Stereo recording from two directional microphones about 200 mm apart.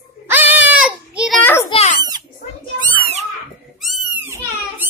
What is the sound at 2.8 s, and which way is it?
Cat, 20° right (ahead or behind).